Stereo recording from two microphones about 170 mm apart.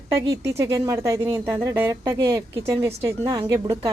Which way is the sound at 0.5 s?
20° right (ahead or behind).